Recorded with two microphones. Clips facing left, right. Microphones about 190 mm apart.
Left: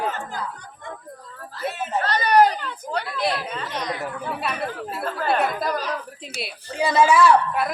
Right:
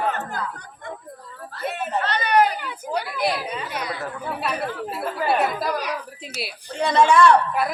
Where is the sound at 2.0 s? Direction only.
40° left (ahead or behind).